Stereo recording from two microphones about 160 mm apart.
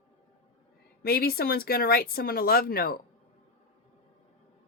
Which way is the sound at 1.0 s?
75° left (ahead or behind).